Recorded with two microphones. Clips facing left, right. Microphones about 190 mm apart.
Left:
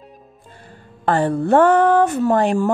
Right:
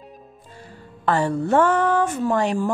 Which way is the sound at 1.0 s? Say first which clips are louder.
Left 3 dB; 55° left (ahead or behind).